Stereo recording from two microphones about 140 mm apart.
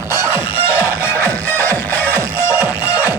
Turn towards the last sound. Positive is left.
turn(degrees=-10)  # may be behind; listen again after turning